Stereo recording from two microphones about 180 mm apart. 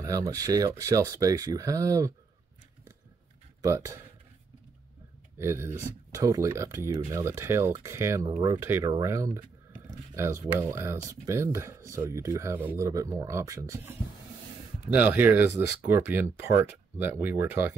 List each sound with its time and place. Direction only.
0.0 s speech: 20° right (ahead or behind)
3.6 s speech: 15° right (ahead or behind)
5.4 s speech: 15° right (ahead or behind)
15.0 s speech: 10° right (ahead or behind)